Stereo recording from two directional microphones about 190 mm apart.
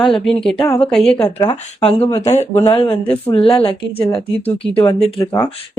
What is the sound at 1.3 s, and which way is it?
Speech, 25° left (ahead or behind).